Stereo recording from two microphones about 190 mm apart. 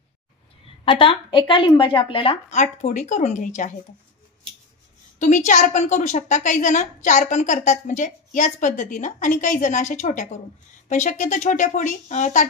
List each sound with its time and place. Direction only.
0.8 s a woman's voice: 25° left (ahead or behind)
5.2 s a woman's voice: 40° left (ahead or behind)